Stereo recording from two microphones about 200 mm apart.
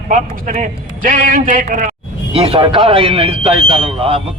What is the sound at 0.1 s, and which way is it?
A man's voice, 40° right (ahead or behind).